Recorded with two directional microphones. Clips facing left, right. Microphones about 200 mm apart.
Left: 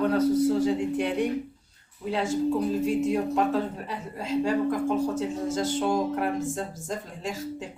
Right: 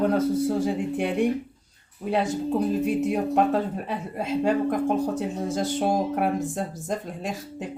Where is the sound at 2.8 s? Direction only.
60° right (ahead or behind).